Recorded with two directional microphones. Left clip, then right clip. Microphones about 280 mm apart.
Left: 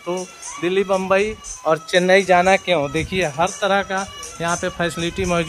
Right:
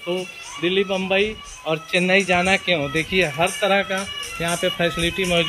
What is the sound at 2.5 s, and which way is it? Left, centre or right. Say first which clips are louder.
Speech: left 3 dB; centre.